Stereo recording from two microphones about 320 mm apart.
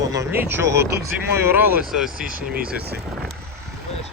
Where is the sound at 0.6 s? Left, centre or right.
Right.